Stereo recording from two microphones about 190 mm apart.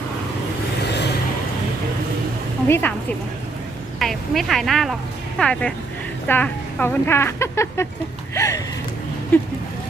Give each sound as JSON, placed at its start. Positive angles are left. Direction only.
{"t": 2.6, "sound": "speech", "side_deg": 10}
{"t": 4.0, "sound": "a woman's voice", "side_deg": 0}